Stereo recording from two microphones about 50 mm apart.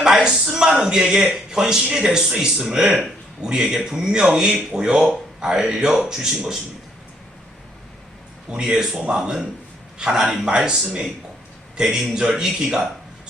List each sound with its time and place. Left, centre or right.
0.0 s speech: centre
8.4 s speech: centre
11.8 s speech: centre